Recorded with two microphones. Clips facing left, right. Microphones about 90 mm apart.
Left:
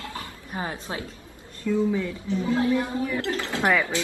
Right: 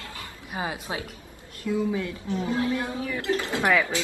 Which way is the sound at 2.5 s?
25° left (ahead or behind).